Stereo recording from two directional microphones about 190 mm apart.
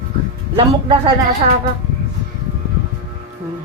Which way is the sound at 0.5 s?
25° right (ahead or behind).